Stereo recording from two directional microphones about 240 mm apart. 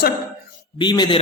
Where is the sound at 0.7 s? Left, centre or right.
Centre.